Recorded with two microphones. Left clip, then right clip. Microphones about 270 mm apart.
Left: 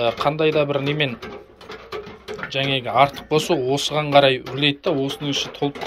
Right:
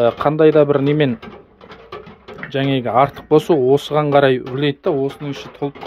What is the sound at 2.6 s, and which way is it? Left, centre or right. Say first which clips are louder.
Speech: right 2 dB; right.